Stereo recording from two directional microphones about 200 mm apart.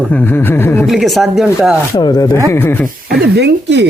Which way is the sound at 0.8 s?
Centre (ahead or behind).